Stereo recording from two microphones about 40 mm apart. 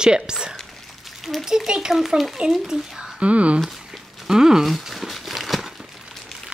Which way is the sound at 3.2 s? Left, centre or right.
Right.